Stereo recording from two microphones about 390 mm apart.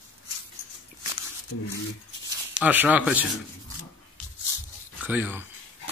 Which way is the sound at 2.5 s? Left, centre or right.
Centre.